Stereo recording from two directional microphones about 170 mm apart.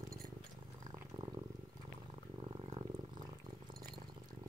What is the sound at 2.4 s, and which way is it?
Purr, 30° right (ahead or behind).